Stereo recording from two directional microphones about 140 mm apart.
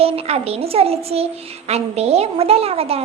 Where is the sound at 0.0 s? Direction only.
45° right (ahead or behind).